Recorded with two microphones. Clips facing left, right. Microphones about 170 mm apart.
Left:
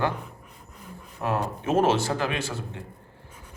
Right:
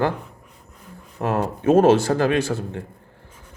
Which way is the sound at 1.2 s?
45° right (ahead or behind).